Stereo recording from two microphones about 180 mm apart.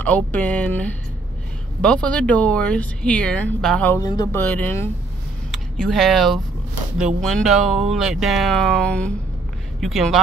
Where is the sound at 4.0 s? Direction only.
20° left (ahead or behind).